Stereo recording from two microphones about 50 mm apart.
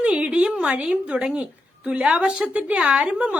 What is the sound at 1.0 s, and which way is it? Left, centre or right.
A woman's voice, centre.